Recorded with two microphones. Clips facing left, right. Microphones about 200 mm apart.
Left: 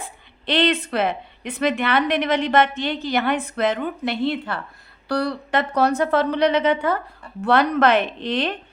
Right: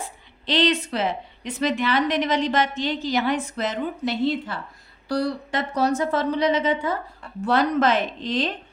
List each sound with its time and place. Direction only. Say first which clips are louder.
0.0 s a woman's voice: left 1 dB; 55° left (ahead or behind)